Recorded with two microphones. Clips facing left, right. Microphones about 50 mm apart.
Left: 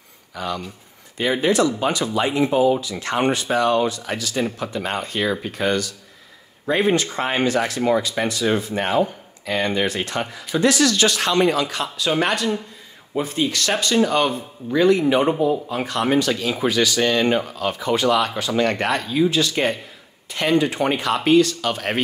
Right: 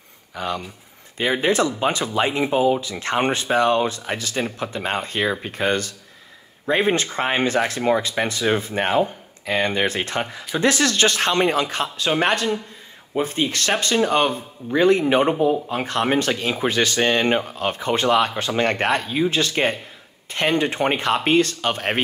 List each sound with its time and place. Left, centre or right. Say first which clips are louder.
0.4 s speech: even; right